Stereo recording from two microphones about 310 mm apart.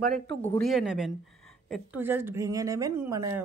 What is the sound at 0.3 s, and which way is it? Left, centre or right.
Speech, centre.